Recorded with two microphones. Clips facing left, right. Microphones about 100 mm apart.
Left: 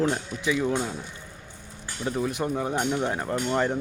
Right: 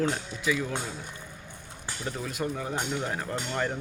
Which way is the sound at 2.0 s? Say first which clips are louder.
Left 6 dB; 25° left (ahead or behind).